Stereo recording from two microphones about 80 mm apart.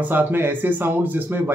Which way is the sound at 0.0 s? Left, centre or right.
Right.